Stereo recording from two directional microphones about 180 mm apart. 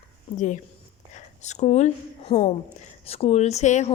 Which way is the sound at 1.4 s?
40° left (ahead or behind).